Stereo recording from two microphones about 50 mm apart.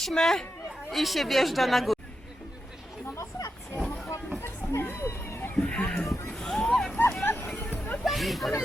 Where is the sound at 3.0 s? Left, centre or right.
Left.